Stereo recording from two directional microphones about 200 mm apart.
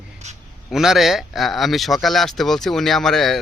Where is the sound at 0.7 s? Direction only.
Centre (ahead or behind).